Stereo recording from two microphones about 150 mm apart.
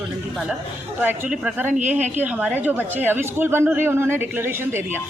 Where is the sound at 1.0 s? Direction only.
10° right (ahead or behind).